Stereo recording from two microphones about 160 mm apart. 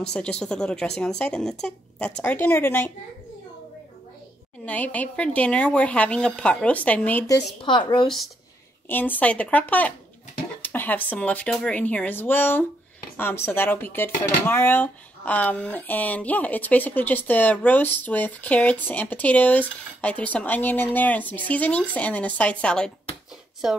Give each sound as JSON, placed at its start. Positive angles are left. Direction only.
{"t": 0.0, "sound": "speech", "side_deg": 5}
{"t": 4.6, "sound": "speech", "side_deg": 10}
{"t": 7.2, "sound": "a woman's voice", "side_deg": 25}
{"t": 8.8, "sound": "speech", "side_deg": 10}